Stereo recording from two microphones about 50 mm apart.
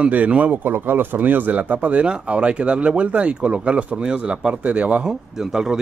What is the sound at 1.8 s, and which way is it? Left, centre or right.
Speech, right.